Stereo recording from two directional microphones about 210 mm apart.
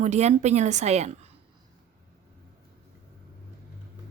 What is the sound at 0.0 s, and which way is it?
A woman's voice, 35° right (ahead or behind).